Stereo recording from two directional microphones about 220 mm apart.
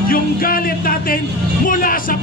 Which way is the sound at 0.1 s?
40° left (ahead or behind).